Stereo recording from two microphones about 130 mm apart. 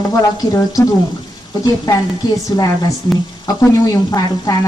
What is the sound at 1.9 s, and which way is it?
A woman's voice, 30° left (ahead or behind).